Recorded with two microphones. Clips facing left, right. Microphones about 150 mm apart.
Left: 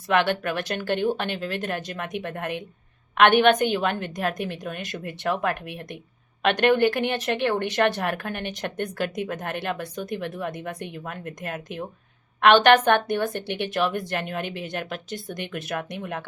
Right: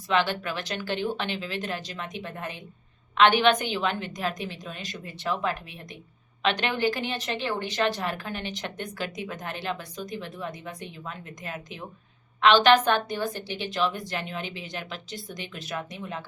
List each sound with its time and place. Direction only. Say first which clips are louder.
0.1 s speech: left 3 dB; 60° left (ahead or behind)